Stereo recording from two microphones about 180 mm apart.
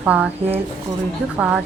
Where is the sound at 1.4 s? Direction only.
10° right (ahead or behind).